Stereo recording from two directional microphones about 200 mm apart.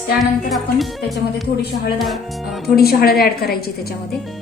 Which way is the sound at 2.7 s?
50° left (ahead or behind).